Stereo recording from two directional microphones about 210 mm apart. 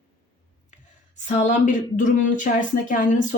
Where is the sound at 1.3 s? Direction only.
35° left (ahead or behind).